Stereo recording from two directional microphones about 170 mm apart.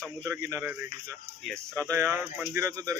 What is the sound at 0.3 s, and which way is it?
Speech, 15° right (ahead or behind).